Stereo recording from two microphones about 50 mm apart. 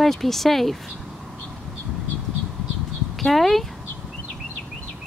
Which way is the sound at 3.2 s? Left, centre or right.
Centre.